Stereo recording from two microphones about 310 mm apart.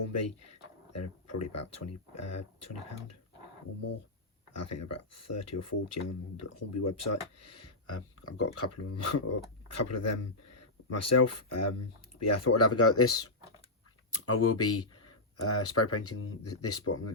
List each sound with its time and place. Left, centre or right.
0.9 s speech: left
4.5 s speech: left